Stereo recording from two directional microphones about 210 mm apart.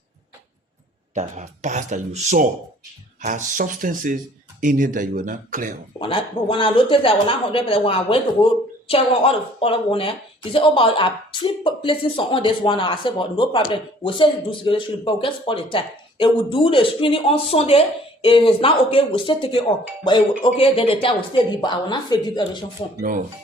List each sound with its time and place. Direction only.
1.1 s speech: 35° right (ahead or behind)
6.0 s speech: 25° left (ahead or behind)